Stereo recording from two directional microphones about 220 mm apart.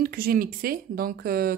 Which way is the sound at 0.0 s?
45° right (ahead or behind).